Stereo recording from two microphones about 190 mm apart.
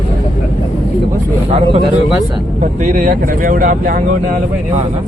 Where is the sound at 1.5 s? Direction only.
30° right (ahead or behind).